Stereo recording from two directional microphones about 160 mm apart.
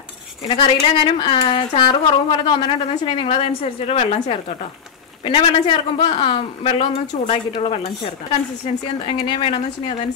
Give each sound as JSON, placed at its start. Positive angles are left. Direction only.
{"t": 0.5, "sound": "speech", "side_deg": 35}